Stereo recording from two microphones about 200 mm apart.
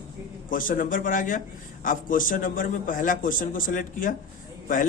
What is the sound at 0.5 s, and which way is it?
A man's voice, 45° left (ahead or behind).